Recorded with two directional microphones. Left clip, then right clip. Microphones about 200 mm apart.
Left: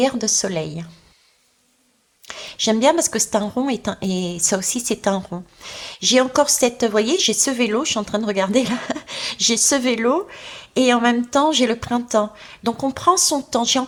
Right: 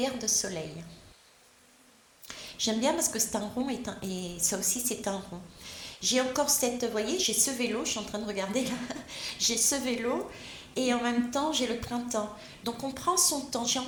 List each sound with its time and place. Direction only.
0.0 s a woman's voice: 40° left (ahead or behind)
2.2 s a woman's voice: 40° left (ahead or behind)